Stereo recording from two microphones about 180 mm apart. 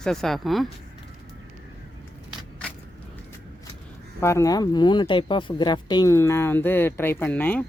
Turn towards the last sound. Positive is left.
turn(degrees=10)  # may be behind; listen again after turning